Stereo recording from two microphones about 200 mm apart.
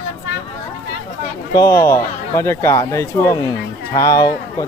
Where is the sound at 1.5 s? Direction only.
15° left (ahead or behind).